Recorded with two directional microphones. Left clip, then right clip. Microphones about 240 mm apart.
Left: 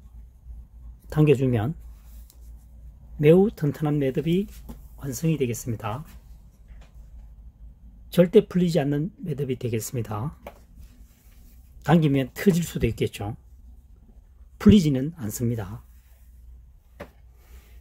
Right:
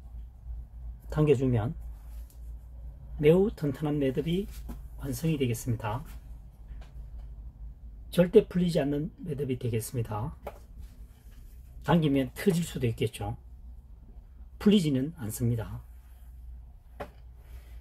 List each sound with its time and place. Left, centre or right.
1.1 s speech: left
3.2 s speech: left
8.1 s speech: left
11.8 s speech: left
14.6 s speech: left